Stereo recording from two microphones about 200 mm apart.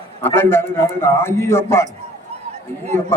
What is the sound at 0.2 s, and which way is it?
A man's voice, 10° left (ahead or behind).